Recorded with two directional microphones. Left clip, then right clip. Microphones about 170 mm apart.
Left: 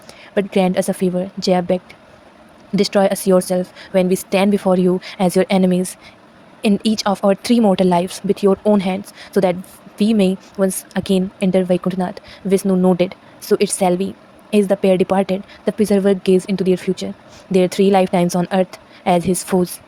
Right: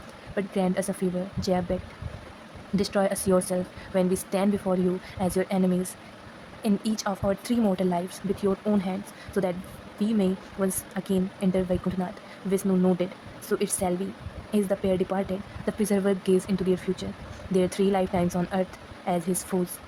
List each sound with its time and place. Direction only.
0.3 s speech: 45° left (ahead or behind)